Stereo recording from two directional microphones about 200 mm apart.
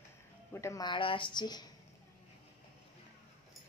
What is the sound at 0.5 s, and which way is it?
A woman's voice, 15° left (ahead or behind).